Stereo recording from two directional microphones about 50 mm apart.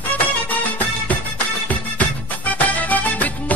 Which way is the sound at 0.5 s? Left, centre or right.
Left.